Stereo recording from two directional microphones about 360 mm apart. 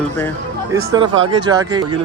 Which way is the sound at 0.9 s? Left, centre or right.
Centre.